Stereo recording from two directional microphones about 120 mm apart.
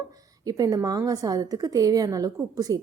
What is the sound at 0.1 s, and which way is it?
A woman's voice, 30° right (ahead or behind).